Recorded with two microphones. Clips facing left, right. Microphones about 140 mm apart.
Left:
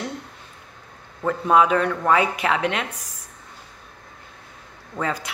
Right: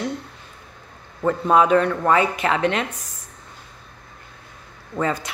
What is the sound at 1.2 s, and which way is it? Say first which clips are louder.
Speech: right 1 dB; centre (ahead or behind).